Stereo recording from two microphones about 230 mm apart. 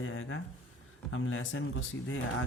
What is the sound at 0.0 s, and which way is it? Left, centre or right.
Speech, left.